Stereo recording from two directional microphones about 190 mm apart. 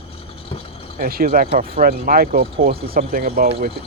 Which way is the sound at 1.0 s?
50° right (ahead or behind).